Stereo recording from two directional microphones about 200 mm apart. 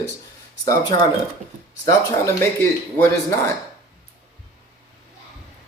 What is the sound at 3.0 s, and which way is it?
Speech, 10° left (ahead or behind).